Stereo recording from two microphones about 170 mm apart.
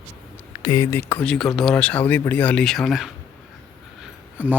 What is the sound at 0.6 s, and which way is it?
Speech, 25° left (ahead or behind).